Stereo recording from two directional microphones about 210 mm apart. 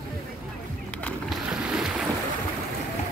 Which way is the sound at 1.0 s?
Centre (ahead or behind).